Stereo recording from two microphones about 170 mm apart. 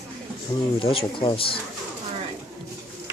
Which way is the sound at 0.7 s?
35° left (ahead or behind).